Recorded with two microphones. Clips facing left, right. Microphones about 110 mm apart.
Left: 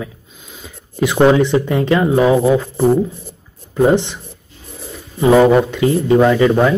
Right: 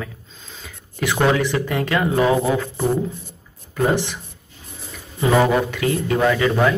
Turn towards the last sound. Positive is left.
turn(degrees=25)  # may be behind; listen again after turning